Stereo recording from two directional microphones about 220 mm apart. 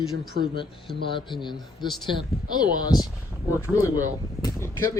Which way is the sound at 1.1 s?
20° left (ahead or behind).